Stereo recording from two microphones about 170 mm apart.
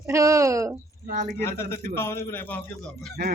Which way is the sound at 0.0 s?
20° right (ahead or behind).